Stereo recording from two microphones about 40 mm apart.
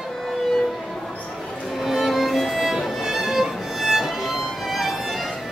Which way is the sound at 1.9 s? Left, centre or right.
Centre.